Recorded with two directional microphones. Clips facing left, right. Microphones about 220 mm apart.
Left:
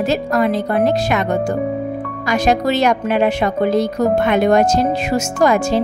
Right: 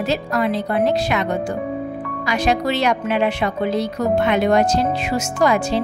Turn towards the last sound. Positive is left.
turn(degrees=45)  # may be behind; listen again after turning